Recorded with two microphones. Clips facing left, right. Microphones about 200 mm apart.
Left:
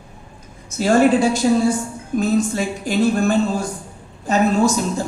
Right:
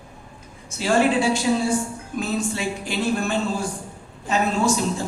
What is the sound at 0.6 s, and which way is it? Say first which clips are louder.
Speech: left 5 dB; 40° left (ahead or behind).